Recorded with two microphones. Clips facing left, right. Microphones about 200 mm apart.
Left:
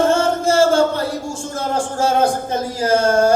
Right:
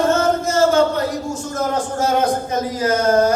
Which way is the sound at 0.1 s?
30° left (ahead or behind).